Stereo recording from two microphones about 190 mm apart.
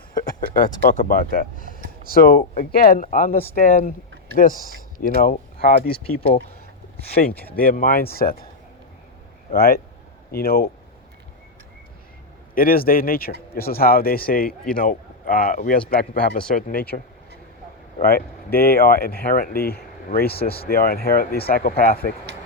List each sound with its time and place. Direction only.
0.1 s speech: 50° left (ahead or behind)
4.9 s speech: 45° left (ahead or behind)
7.5 s speech: 50° left (ahead or behind)
9.5 s speech: 55° left (ahead or behind)
12.5 s a man's voice: 50° left (ahead or behind)
18.0 s speech: 50° left (ahead or behind)